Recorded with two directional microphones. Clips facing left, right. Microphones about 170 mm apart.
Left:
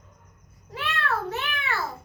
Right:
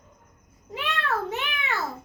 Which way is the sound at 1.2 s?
20° right (ahead or behind).